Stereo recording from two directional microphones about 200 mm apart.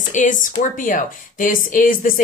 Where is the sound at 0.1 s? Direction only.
40° left (ahead or behind).